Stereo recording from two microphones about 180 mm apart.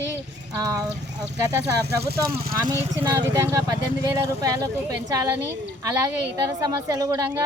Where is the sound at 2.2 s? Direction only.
20° right (ahead or behind).